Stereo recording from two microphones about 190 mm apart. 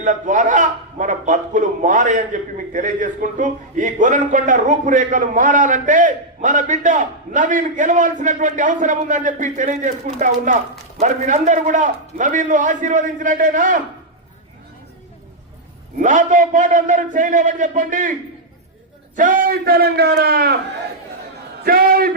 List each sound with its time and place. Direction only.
0.0 s a man's voice: 40° right (ahead or behind)
16.0 s a man's voice: 40° right (ahead or behind)
19.1 s a man's voice: 45° right (ahead or behind)
21.6 s a man's voice: 50° right (ahead or behind)